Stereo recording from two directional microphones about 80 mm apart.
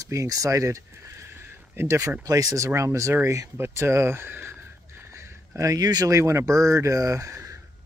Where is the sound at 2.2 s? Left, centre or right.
Right.